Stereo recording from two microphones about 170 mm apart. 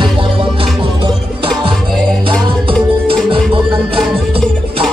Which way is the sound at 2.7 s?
30° right (ahead or behind).